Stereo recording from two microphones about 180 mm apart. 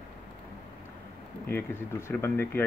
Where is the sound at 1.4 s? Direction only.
10° left (ahead or behind).